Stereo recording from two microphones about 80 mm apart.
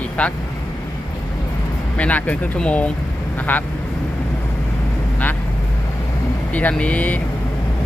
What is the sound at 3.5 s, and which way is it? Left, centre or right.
Speech, left.